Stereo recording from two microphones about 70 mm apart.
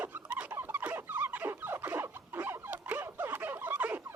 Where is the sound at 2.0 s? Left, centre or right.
Right.